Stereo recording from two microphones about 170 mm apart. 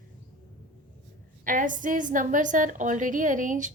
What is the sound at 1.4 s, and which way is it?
A woman's voice, 50° right (ahead or behind).